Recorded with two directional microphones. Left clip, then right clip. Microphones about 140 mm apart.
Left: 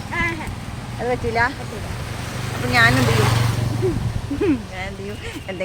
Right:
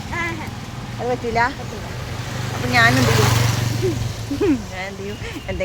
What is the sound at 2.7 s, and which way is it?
Speech, 15° right (ahead or behind).